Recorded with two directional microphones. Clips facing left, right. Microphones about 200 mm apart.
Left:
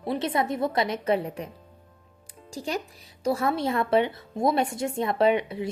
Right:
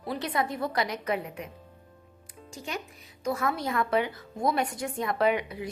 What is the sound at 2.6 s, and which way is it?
Speech, 35° left (ahead or behind).